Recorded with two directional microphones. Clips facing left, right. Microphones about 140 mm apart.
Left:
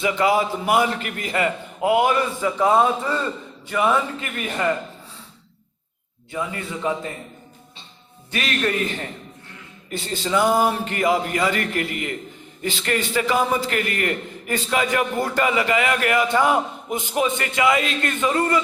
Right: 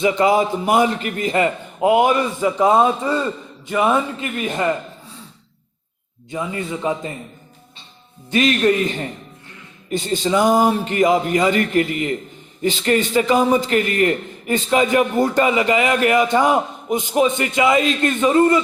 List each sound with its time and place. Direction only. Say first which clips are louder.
0.0 s a man's voice: right 4 dB; 25° right (ahead or behind)
6.3 s a man's voice: right 3 dB; 20° right (ahead or behind)
8.3 s a man's voice: right 8 dB; 20° right (ahead or behind)